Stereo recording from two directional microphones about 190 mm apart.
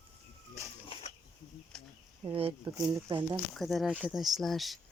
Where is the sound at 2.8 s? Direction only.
20° right (ahead or behind).